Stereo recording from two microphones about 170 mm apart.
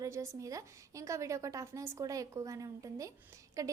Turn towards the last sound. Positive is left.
turn(degrees=-20)  # may be behind; listen again after turning